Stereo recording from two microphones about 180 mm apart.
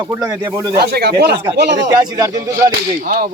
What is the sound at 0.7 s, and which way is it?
Speech, 60° right (ahead or behind).